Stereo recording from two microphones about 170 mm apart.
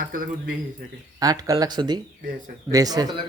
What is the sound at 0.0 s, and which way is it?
Speech, 55° right (ahead or behind).